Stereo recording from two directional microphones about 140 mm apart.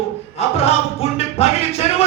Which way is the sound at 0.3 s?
45° left (ahead or behind).